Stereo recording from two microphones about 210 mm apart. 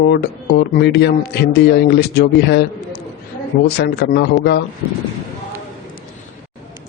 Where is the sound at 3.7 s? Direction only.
50° left (ahead or behind).